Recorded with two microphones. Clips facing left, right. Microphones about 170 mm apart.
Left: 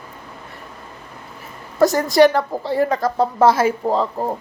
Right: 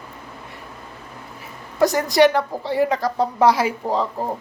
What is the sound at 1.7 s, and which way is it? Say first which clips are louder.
A woman's voice: left 3 dB; 45° left (ahead or behind).